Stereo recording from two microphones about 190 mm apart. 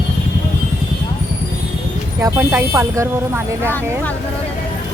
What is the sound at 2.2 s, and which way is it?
Speech, 15° right (ahead or behind).